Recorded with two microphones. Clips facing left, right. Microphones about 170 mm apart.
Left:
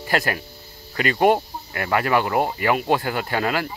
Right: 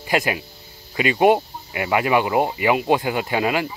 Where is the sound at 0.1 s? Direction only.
15° right (ahead or behind).